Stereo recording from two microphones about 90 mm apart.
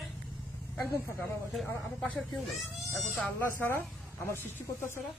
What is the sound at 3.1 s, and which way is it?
Speech, 20° left (ahead or behind).